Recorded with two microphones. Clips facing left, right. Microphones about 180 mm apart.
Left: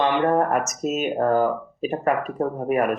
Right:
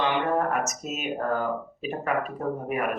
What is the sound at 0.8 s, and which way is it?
Speech, 40° left (ahead or behind).